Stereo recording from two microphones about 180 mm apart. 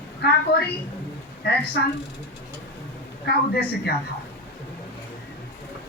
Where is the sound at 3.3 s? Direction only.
60° left (ahead or behind).